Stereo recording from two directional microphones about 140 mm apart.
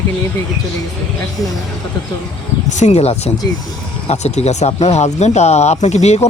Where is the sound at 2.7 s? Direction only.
55° left (ahead or behind).